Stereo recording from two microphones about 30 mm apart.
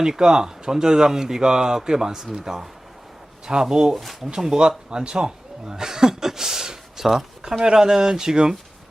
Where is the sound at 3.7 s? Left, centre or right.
Right.